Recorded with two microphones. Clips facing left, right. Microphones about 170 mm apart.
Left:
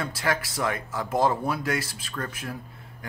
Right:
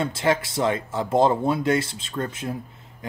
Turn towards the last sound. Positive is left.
turn(degrees=-25)  # may be behind; listen again after turning